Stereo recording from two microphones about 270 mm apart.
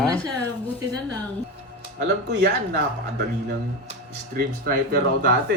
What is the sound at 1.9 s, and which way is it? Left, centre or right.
Speech, right.